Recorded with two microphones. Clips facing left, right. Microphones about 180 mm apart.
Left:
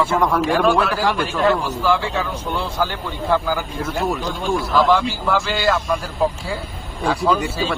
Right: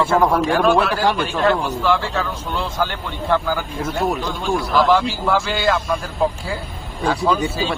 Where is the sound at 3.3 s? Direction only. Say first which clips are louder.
Even; 5° left (ahead or behind).